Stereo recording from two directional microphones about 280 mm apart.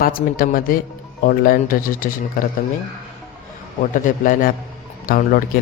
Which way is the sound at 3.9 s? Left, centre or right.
Left.